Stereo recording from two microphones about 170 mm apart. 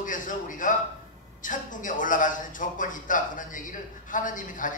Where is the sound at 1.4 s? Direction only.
50° left (ahead or behind).